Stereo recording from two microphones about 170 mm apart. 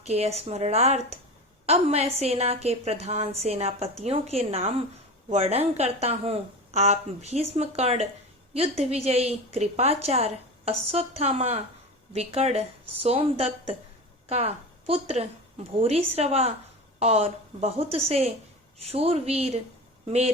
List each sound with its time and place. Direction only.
0.0 s a woman's voice: 40° right (ahead or behind)